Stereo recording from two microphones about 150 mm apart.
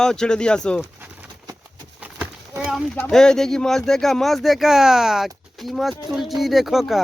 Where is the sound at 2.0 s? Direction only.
10° right (ahead or behind).